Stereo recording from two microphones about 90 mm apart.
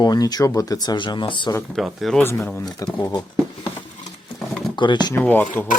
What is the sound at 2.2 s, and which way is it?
Speech, 30° left (ahead or behind).